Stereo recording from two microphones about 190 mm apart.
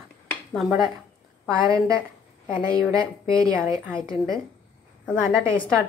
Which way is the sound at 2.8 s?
15° right (ahead or behind).